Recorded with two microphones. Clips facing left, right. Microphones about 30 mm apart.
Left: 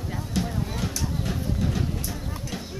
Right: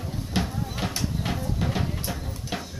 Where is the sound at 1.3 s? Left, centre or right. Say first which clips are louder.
Even; right.